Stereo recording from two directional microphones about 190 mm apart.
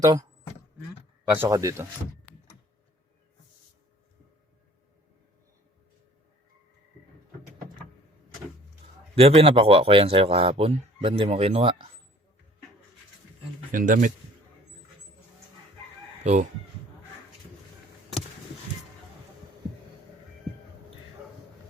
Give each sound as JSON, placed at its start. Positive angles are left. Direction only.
{"t": 0.0, "sound": "speech", "side_deg": -20}
{"t": 1.3, "sound": "speech", "side_deg": -15}
{"t": 9.1, "sound": "a man's voice", "side_deg": -30}
{"t": 13.7, "sound": "speech", "side_deg": -45}
{"t": 16.2, "sound": "speech", "side_deg": -40}